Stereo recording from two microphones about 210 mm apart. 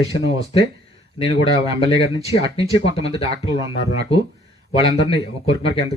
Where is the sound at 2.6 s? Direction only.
25° left (ahead or behind).